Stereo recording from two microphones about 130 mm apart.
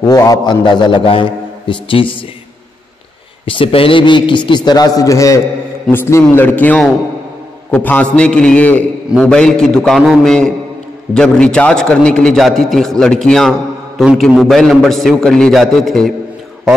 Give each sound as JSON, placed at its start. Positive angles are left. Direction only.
{"t": 0.0, "sound": "a man's voice", "side_deg": 30}
{"t": 3.4, "sound": "a man's voice", "side_deg": 45}